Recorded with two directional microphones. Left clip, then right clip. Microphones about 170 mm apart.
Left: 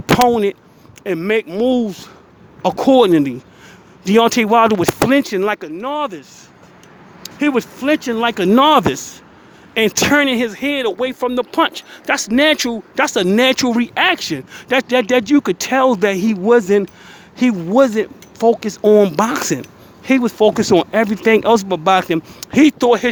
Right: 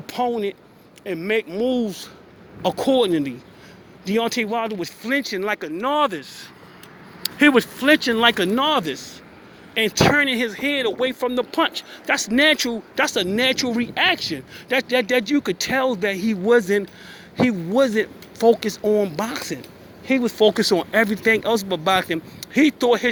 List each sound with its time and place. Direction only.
0.0 s speech: 50° left (ahead or behind)
1.8 s speech: 35° left (ahead or behind)
5.8 s speech: 5° left (ahead or behind)
7.5 s speech: 20° left (ahead or behind)
8.5 s speech: 40° left (ahead or behind)